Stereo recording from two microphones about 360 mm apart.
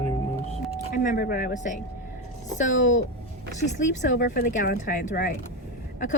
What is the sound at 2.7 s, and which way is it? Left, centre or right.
Speech, left.